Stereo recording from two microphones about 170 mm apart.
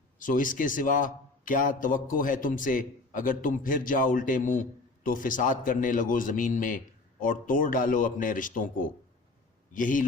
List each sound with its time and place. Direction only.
0.2 s a man's voice: 50° left (ahead or behind)
9.7 s a man's voice: 50° left (ahead or behind)